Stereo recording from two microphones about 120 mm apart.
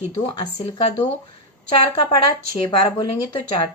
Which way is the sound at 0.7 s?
50° left (ahead or behind).